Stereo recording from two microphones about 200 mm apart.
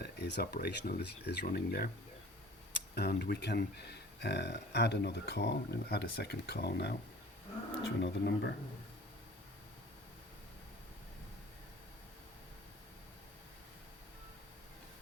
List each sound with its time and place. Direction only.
0.0 s speech: 55° left (ahead or behind)
2.9 s speech: 55° left (ahead or behind)
8.0 s speech: 55° left (ahead or behind)